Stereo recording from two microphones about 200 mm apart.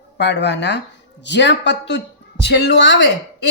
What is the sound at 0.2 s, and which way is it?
A woman's voice, 60° left (ahead or behind).